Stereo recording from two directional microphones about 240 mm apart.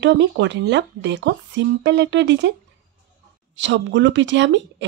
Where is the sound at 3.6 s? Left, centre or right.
Right.